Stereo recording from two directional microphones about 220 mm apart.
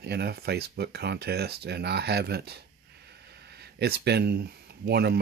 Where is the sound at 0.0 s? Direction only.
45° right (ahead or behind).